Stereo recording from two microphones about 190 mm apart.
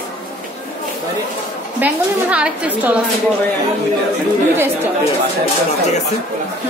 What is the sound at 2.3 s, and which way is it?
Speech, 5° right (ahead or behind).